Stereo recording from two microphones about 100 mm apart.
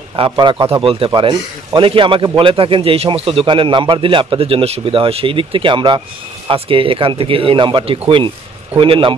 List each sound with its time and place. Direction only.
0.1 s a man's voice: 55° right (ahead or behind)
6.5 s a man's voice: 60° right (ahead or behind)